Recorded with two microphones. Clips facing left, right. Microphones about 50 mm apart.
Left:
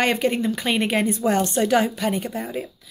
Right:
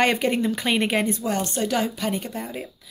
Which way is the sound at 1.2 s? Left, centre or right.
Left.